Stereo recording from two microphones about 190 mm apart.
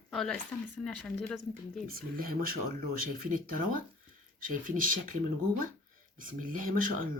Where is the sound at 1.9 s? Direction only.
50° right (ahead or behind).